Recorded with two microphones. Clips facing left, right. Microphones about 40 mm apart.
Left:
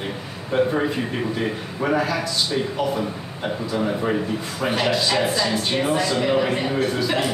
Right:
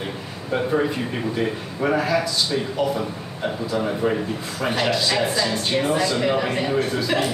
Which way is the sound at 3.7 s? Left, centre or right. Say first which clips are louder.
Even; centre.